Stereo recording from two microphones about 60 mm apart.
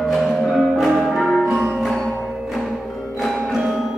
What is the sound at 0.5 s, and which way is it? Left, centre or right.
Music, centre.